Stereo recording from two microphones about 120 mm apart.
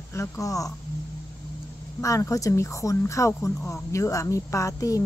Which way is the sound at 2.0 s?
25° left (ahead or behind).